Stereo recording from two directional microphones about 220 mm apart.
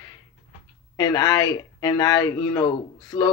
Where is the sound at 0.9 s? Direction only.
20° left (ahead or behind).